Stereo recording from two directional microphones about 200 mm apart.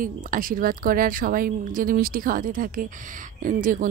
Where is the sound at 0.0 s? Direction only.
45° right (ahead or behind).